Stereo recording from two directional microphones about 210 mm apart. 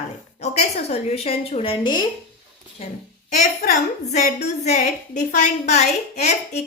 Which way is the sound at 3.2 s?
35° left (ahead or behind).